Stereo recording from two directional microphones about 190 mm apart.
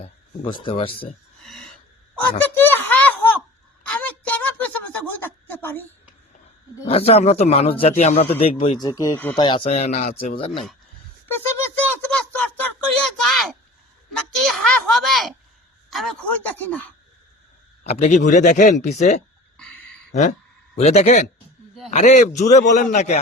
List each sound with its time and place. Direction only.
0.4 s speech: 25° left (ahead or behind)
2.4 s a sound: 10° left (ahead or behind)
6.8 s a man's voice: 30° left (ahead or behind)
8.8 s speech: 20° left (ahead or behind)
9.3 s a man's voice: 25° left (ahead or behind); by 10.3 s 40° left (ahead or behind)
11.3 s a sound: 10° left (ahead or behind)
16.6 s speech: 10° left (ahead or behind)
17.8 s a man's voice: 35° left (ahead or behind)
20.7 s a man's voice: 35° left (ahead or behind)